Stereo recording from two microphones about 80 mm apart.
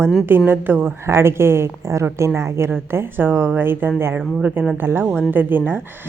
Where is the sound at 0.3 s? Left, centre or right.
Right.